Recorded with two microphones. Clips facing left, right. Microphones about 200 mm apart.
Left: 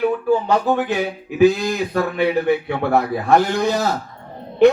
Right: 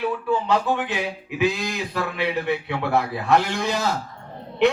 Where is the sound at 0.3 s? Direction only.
40° left (ahead or behind).